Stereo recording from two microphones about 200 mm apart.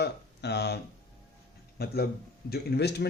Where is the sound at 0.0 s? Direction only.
55° left (ahead or behind).